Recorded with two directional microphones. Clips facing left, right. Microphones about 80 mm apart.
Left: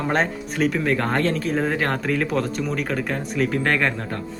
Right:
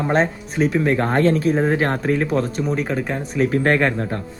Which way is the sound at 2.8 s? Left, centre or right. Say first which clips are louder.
Right 2 dB; centre.